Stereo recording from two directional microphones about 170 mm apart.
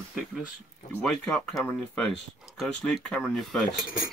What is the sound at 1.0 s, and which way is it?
Speech, 5° left (ahead or behind).